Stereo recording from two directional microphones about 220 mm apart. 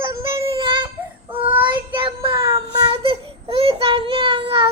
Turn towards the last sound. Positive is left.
turn(degrees=-25)  # may be behind; listen again after turning